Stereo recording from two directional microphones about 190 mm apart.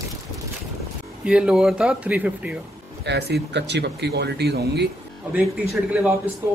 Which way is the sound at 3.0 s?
65° right (ahead or behind).